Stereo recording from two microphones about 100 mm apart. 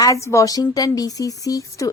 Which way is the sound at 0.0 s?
30° left (ahead or behind).